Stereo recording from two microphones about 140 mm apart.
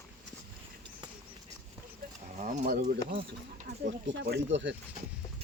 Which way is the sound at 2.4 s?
55° right (ahead or behind).